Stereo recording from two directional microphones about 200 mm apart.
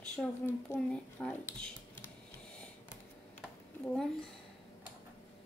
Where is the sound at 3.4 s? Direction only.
5° left (ahead or behind).